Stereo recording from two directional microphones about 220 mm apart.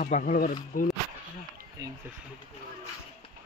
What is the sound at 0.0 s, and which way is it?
Speech, 35° left (ahead or behind).